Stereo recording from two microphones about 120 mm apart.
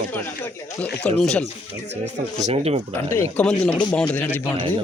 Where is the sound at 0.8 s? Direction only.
10° left (ahead or behind).